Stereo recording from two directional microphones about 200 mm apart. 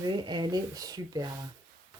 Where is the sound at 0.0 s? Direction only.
20° right (ahead or behind).